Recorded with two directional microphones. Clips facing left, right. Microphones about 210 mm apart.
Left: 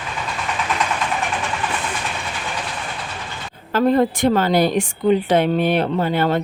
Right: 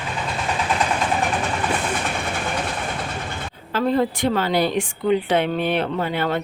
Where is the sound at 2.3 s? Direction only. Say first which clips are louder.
Right 3 dB; 55° right (ahead or behind).